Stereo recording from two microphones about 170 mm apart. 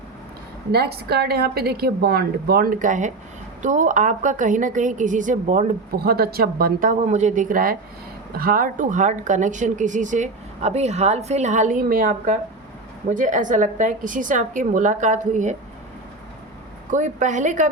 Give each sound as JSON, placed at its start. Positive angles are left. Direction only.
{"t": 0.7, "sound": "a woman's voice", "side_deg": -70}
{"t": 6.0, "sound": "speech", "side_deg": -65}
{"t": 16.9, "sound": "speech", "side_deg": -45}